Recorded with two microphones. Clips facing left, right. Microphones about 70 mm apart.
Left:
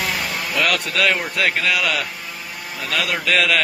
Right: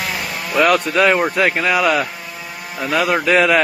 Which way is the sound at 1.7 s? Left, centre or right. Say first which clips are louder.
Right 5 dB; right.